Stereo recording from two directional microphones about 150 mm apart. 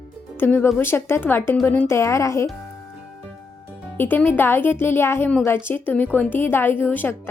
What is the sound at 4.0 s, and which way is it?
Speech, 15° left (ahead or behind).